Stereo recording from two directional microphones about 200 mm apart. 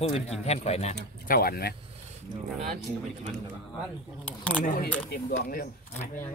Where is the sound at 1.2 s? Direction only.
50° left (ahead or behind).